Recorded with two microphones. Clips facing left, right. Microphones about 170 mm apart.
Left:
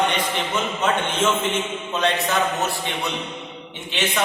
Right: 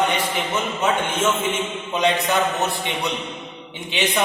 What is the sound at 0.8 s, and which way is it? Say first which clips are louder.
Speech: right 1 dB; 10° right (ahead or behind).